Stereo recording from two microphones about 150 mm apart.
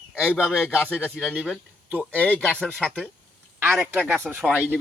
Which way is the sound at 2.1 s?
10° left (ahead or behind).